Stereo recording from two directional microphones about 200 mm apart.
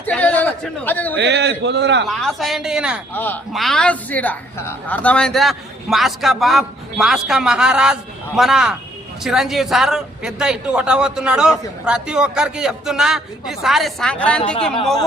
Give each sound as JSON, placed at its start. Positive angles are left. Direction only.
{"t": 0.0, "sound": "chatter", "side_deg": 10}
{"t": 1.1, "sound": "a man's voice", "side_deg": -60}
{"t": 2.0, "sound": "a man's voice", "side_deg": 0}
{"t": 3.1, "sound": "a man's voice", "side_deg": 10}